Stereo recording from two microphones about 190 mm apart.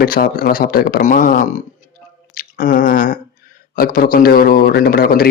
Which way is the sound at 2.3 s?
45° left (ahead or behind).